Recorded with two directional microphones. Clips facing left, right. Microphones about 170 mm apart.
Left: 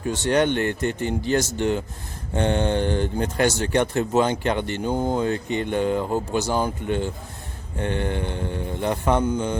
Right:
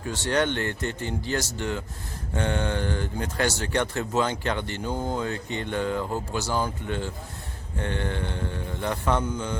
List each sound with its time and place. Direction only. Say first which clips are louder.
0.1 s mantra: left 5 dB; 15° left (ahead or behind)
1.5 s speech: left 7 dB; 20° left (ahead or behind)
7.8 s mantra: left 4 dB; 15° left (ahead or behind)